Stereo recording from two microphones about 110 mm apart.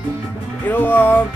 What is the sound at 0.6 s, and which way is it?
Music, 20° left (ahead or behind).